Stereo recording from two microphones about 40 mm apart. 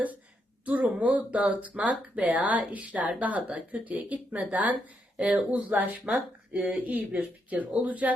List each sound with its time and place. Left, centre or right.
0.6 s speech: right